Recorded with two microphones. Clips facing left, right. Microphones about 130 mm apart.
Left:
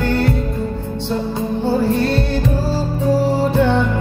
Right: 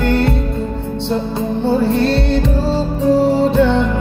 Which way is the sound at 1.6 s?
20° right (ahead or behind).